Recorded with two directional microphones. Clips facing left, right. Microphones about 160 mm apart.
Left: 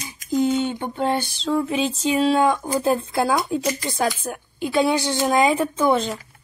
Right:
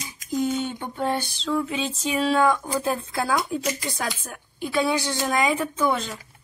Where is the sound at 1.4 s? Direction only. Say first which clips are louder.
Left 5 dB; 35° left (ahead or behind).